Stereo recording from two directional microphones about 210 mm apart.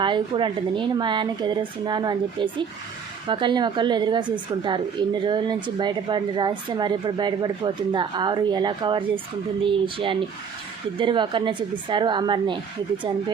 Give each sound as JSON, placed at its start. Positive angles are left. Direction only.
{"t": 0.0, "sound": "a woman's voice", "side_deg": -25}